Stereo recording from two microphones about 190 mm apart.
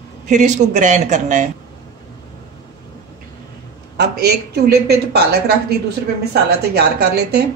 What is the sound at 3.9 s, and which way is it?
A woman's voice, 60° right (ahead or behind).